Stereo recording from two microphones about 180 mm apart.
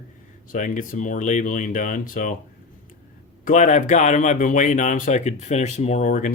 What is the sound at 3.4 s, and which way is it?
Speech, 40° left (ahead or behind).